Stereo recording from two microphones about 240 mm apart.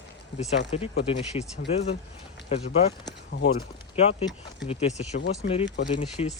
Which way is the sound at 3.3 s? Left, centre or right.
Left.